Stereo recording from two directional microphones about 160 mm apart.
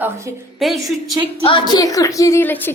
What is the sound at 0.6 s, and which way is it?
Speech, centre (ahead or behind).